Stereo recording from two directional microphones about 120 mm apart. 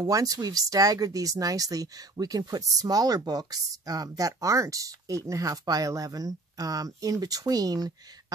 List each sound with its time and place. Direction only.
0.0 s speech: 30° right (ahead or behind)